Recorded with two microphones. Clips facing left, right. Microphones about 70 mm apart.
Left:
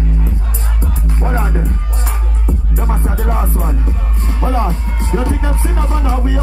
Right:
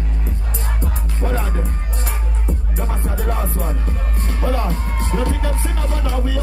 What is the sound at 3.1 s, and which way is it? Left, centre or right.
Music, left.